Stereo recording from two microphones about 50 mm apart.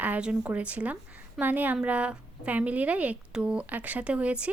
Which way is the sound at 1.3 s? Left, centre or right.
Right.